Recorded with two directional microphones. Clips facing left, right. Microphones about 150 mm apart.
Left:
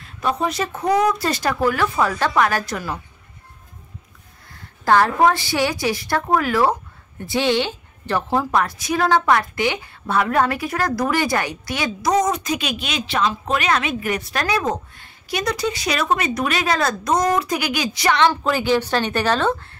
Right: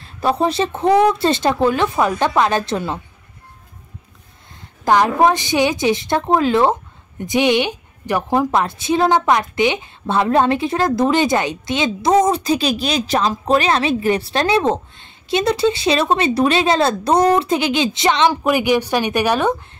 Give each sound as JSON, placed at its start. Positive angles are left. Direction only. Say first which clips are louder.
{"t": 0.0, "sound": "a woman's voice", "louder": "right 4 dB", "side_deg": -30}
{"t": 4.6, "sound": "a woman's voice", "louder": "right 1 dB", "side_deg": -15}